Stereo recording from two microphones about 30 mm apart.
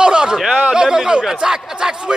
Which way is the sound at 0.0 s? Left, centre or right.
Right.